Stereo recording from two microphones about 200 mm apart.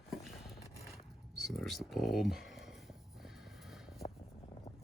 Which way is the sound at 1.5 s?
Centre (ahead or behind).